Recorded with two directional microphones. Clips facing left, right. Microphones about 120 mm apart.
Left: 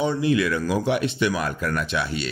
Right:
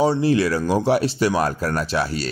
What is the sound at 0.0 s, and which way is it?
Speech, 35° right (ahead or behind).